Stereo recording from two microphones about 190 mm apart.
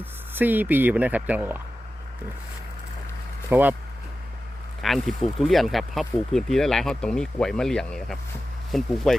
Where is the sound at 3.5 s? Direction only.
10° right (ahead or behind).